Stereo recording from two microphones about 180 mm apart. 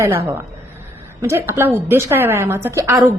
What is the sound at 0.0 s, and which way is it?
A woman's voice, 15° right (ahead or behind).